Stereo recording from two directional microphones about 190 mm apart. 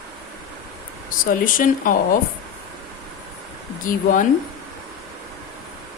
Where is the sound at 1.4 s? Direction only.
45° left (ahead or behind).